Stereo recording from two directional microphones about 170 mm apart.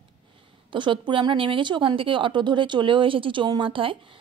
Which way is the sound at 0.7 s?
30° right (ahead or behind).